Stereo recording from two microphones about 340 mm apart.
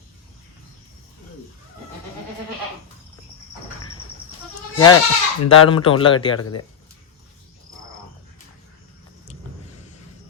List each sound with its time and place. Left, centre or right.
4.9 s speech: left
5.5 s speech: centre
6.3 s speech: left